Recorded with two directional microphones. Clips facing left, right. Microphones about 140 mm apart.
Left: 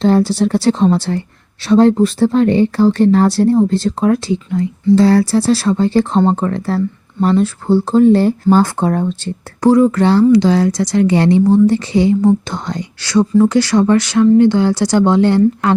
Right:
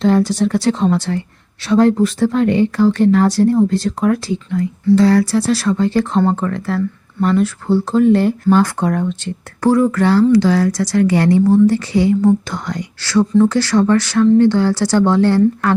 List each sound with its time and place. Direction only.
0.0 s speech: 30° left (ahead or behind)
9.6 s speech: 20° left (ahead or behind)